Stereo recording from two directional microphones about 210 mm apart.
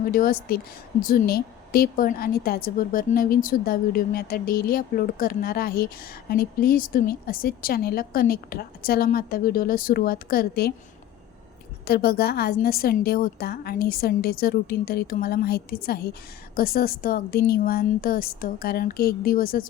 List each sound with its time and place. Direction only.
0.0 s a woman's voice: 45° left (ahead or behind)
11.9 s a woman's voice: 45° left (ahead or behind)